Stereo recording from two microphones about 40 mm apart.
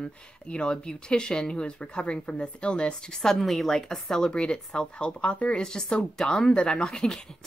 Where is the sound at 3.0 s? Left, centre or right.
Centre.